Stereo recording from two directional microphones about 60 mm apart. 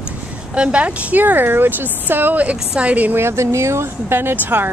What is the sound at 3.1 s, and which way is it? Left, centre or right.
Speech, right.